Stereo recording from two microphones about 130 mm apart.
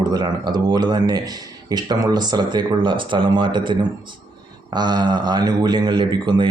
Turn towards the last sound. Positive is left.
turn(degrees=-35)  # may be behind; listen again after turning